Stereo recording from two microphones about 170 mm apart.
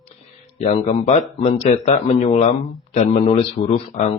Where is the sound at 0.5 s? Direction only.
40° left (ahead or behind).